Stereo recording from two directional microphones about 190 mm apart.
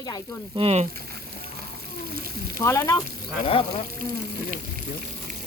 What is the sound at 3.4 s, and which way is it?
Speech, 30° left (ahead or behind).